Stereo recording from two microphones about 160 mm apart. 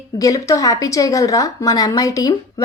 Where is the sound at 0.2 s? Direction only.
20° left (ahead or behind).